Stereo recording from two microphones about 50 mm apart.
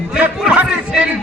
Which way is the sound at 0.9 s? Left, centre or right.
Centre.